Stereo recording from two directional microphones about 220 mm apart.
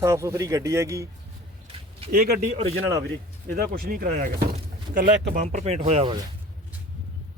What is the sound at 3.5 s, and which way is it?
Speech, 45° right (ahead or behind).